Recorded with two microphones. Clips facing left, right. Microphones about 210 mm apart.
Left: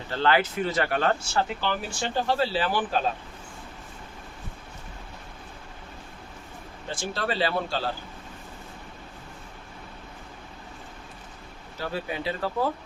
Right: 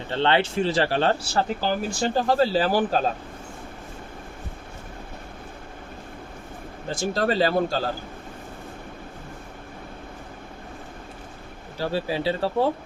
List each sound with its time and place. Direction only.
0.1 s speech: 25° right (ahead or behind)
6.8 s speech: 40° right (ahead or behind)
11.8 s speech: 30° right (ahead or behind)